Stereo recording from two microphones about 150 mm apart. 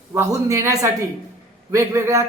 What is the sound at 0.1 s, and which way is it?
A man's voice, 20° right (ahead or behind).